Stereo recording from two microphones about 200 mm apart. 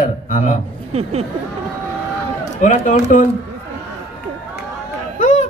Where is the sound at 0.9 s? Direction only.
30° right (ahead or behind).